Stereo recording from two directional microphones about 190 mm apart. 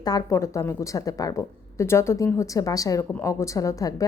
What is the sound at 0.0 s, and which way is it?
A woman's voice, 20° left (ahead or behind).